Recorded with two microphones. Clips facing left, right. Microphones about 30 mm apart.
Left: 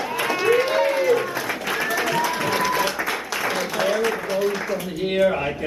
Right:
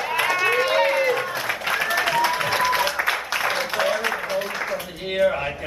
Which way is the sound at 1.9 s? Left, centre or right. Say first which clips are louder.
Right 1 dB; right.